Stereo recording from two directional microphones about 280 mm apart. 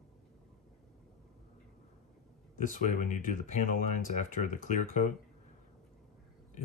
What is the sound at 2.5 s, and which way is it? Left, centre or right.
Speech, left.